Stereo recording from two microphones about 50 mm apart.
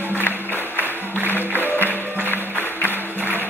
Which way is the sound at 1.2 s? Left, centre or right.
Left.